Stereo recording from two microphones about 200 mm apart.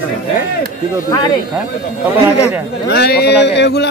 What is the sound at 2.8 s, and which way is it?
Speech, 55° left (ahead or behind).